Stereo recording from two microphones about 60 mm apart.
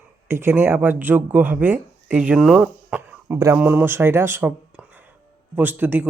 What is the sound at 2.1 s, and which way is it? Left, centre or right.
Speech, centre.